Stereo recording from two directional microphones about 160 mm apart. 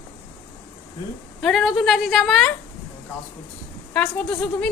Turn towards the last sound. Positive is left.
turn(degrees=5)  # may be behind; listen again after turning